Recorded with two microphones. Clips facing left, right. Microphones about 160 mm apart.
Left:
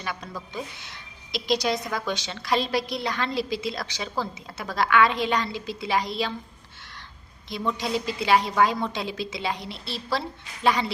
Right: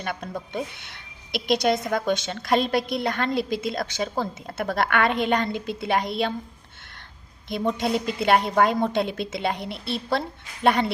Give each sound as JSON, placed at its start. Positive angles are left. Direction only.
{"t": 0.0, "sound": "a woman's voice", "side_deg": -55}
{"t": 7.5, "sound": "a woman's voice", "side_deg": -55}